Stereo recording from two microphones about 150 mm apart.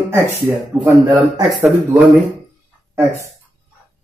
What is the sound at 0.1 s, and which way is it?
Speech, 15° right (ahead or behind).